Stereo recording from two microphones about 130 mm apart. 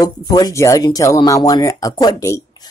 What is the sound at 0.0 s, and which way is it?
Speech, 30° left (ahead or behind).